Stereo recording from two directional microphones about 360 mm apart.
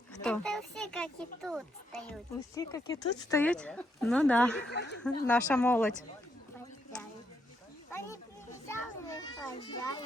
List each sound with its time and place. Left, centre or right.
0.2 s speech: centre
4.7 s speech: left
5.0 s speech: centre
7.9 s a sound: centre
8.6 s children playing: centre